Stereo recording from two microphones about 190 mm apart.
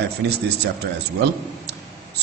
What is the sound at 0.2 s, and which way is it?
Speech, 65° right (ahead or behind).